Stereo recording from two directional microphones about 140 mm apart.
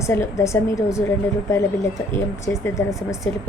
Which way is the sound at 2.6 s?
20° left (ahead or behind).